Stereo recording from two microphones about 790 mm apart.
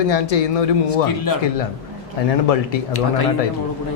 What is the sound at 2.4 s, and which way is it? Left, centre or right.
Speech, left.